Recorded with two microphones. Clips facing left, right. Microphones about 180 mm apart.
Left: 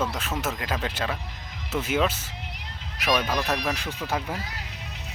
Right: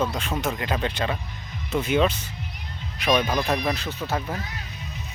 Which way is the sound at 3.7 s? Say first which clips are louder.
Right 2 dB; 15° left (ahead or behind).